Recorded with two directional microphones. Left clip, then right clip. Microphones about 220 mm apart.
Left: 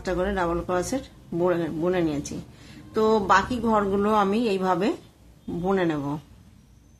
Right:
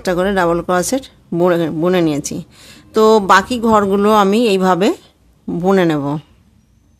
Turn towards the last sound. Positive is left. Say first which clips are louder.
# right 10 dB
turn(degrees=-50)  # may be behind; listen again after turning